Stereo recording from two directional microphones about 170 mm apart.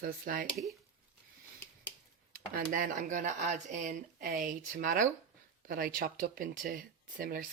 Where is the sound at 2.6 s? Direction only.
55° right (ahead or behind).